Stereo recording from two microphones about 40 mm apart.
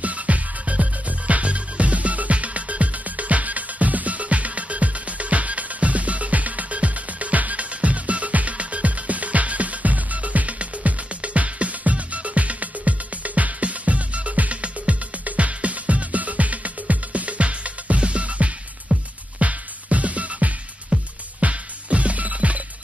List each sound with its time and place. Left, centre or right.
0.0 s music: right